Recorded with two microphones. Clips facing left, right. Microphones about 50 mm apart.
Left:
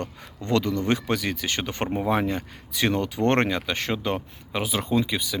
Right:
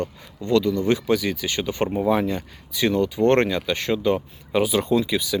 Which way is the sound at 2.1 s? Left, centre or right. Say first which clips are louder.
Right 3 dB; left.